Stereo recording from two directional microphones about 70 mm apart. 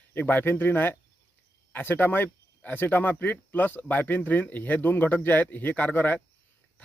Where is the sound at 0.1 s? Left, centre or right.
Left.